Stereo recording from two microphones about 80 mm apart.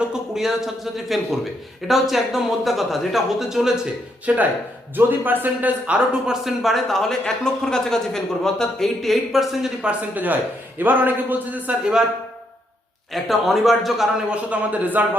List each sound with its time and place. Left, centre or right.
0.0 s a man's voice: centre
4.3 s a man's voice: centre
6.4 s speech: centre
9.8 s a man's voice: right
13.1 s speech: centre
14.5 s a man's voice: centre